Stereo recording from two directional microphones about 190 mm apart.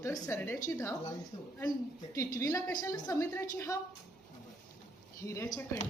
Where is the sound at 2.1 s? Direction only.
15° left (ahead or behind).